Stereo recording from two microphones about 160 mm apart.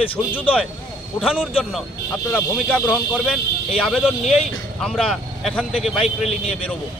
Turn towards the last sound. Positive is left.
turn(degrees=0)  # may be behind; listen again after turning